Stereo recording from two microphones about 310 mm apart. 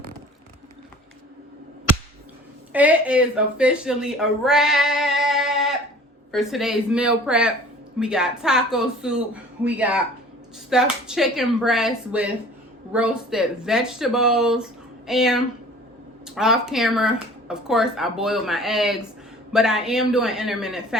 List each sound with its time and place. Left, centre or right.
2.7 s speech: centre